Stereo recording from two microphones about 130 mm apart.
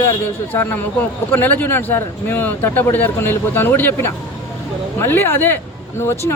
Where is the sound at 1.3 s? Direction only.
15° left (ahead or behind).